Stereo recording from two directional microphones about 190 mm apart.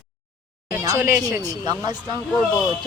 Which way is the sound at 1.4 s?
20° right (ahead or behind).